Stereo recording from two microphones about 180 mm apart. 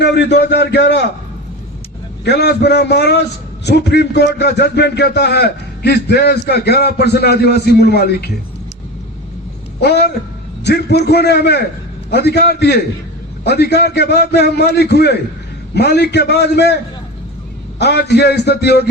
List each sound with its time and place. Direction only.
0.0 s a man's voice: 70° left (ahead or behind)
2.2 s a man's voice: 65° left (ahead or behind)
10.6 s a man's voice: 65° left (ahead or behind)
17.7 s a man's voice: 65° left (ahead or behind)